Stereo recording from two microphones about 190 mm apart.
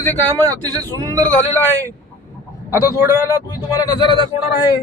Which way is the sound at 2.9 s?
15° right (ahead or behind).